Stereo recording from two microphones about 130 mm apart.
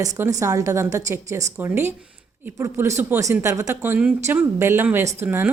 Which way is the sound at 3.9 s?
10° right (ahead or behind).